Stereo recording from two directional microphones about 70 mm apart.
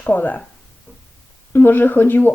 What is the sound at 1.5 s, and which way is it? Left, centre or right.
Speech, left.